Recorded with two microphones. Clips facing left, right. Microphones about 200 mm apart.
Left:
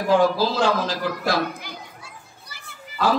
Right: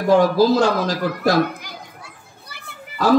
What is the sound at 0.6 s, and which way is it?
Speech, 40° right (ahead or behind).